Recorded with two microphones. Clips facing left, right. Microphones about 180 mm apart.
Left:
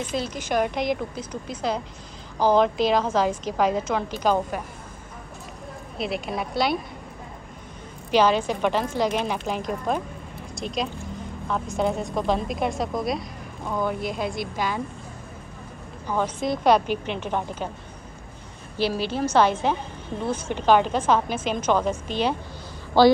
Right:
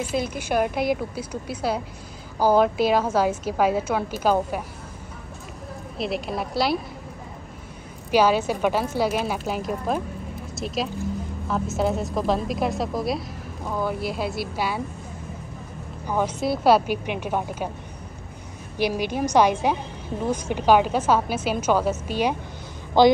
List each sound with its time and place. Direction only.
0.0 s a woman's voice: 10° right (ahead or behind)
5.9 s a woman's voice: centre (ahead or behind)
8.1 s a woman's voice: 10° right (ahead or behind)
16.1 s a woman's voice: 10° right (ahead or behind)
18.8 s a woman's voice: 15° right (ahead or behind)